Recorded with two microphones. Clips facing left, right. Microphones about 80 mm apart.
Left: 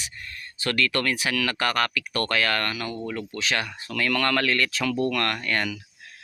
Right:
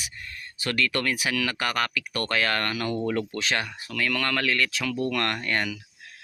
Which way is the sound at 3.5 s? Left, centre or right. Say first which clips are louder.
Left 1 dB; centre.